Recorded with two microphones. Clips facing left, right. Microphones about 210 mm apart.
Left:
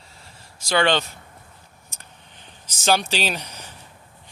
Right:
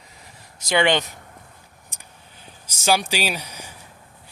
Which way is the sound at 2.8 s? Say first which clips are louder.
Even; 10° right (ahead or behind).